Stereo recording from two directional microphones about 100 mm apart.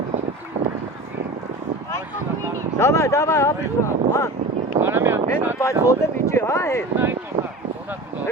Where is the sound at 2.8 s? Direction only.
30° left (ahead or behind).